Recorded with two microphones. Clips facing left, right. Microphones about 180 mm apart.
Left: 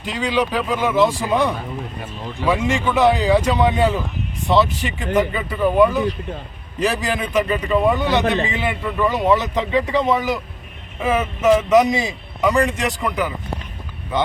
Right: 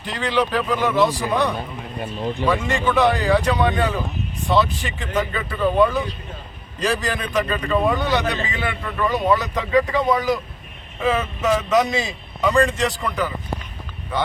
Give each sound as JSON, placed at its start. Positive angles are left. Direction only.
{"t": 0.1, "sound": "a man's voice", "side_deg": 10}
{"t": 9.2, "sound": "a man's voice", "side_deg": 25}